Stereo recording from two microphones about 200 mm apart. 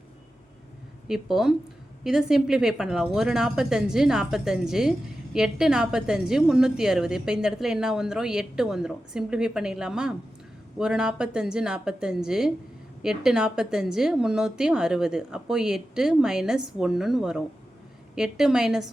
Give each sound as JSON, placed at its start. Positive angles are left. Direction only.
{"t": 1.0, "sound": "speech", "side_deg": 0}